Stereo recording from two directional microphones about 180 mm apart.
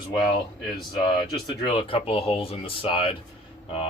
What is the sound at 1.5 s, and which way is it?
Speech, 25° left (ahead or behind).